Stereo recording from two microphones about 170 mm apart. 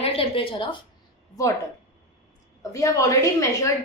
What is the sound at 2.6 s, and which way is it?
A woman's voice, 20° left (ahead or behind).